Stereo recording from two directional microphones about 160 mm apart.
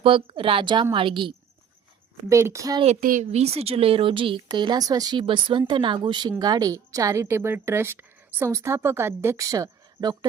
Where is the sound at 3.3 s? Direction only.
40° right (ahead or behind).